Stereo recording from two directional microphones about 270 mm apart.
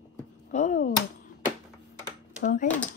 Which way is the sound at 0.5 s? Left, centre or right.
Left.